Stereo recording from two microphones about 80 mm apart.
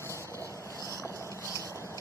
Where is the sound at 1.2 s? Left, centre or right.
Left.